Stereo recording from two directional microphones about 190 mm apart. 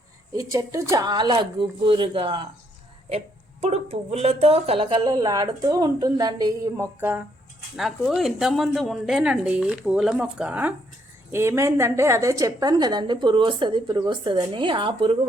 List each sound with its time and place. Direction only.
0.3 s speech: 15° right (ahead or behind)
7.8 s a woman's voice: centre (ahead or behind); by 15.2 s 30° right (ahead or behind)